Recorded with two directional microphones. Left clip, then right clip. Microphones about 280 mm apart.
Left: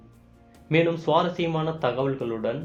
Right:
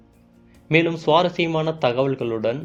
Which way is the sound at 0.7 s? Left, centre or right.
Right.